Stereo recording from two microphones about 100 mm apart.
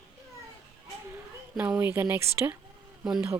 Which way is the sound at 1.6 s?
15° right (ahead or behind).